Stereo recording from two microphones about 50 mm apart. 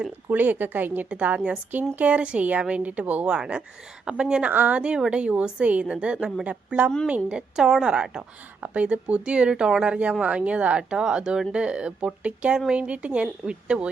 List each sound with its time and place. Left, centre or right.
0.3 s a woman's voice: right
4.5 s a woman's voice: right
4.8 s a woman's voice: centre
8.6 s speech: right